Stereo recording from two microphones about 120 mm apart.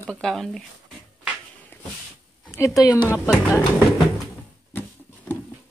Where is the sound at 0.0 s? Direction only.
5° left (ahead or behind).